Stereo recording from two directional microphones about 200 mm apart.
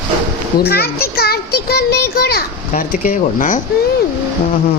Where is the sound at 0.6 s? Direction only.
50° left (ahead or behind).